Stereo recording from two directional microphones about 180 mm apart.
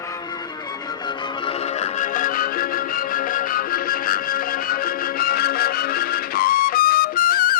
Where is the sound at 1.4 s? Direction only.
35° left (ahead or behind).